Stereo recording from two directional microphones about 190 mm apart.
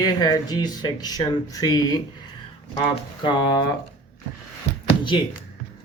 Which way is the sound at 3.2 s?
25° left (ahead or behind).